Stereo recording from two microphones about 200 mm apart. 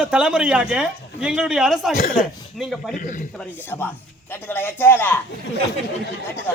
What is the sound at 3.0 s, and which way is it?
Speech, 40° left (ahead or behind).